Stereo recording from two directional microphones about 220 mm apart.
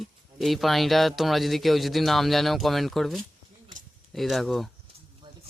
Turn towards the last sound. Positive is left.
turn(degrees=0)  # may be behind; listen again after turning